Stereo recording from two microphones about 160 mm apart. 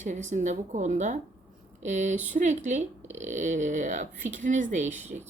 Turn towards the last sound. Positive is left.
turn(degrees=-50)  # may be behind; listen again after turning